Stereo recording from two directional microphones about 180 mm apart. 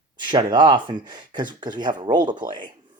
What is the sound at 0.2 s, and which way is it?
Speech, 25° right (ahead or behind).